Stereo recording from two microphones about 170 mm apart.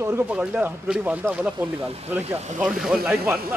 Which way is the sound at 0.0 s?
10° right (ahead or behind).